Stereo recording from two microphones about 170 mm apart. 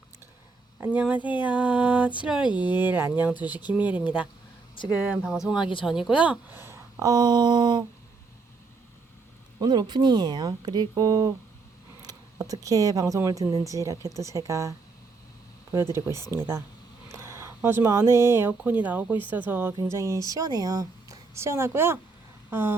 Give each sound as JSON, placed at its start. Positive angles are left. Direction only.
{"t": 0.9, "sound": "a woman's voice", "side_deg": -10}
{"t": 9.6, "sound": "a woman's voice", "side_deg": -25}